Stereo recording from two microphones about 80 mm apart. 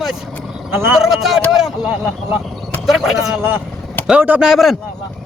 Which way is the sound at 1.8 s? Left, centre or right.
Right.